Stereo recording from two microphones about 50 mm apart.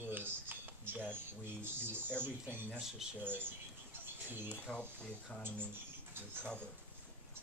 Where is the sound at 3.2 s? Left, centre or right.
Right.